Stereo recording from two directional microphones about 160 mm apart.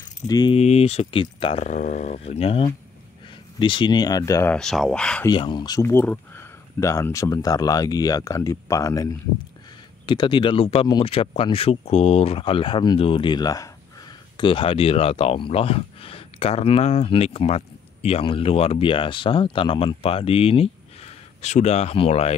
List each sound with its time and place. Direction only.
0.3 s speech: 25° left (ahead or behind)
0.6 s speech: 40° left (ahead or behind)
1.6 s speech: 50° left (ahead or behind); by 4.6 s 15° left (ahead or behind)
4.6 s speech: centre (ahead or behind)
5.2 s speech: 30° left (ahead or behind)